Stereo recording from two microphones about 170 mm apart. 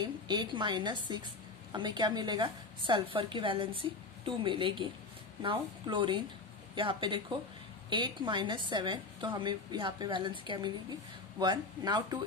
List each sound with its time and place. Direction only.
0.0 s a woman's voice: 25° right (ahead or behind)